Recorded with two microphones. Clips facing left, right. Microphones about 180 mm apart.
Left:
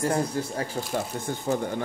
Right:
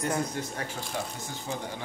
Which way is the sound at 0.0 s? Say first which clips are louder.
Left 4 dB; 30° left (ahead or behind).